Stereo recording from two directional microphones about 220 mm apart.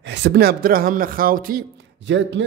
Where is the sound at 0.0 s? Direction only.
50° right (ahead or behind).